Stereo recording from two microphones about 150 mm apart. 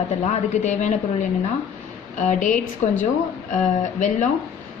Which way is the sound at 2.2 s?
60° left (ahead or behind).